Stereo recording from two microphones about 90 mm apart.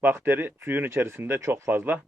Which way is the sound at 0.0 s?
25° right (ahead or behind).